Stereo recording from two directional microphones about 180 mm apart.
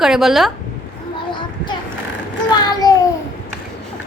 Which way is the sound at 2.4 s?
20° left (ahead or behind).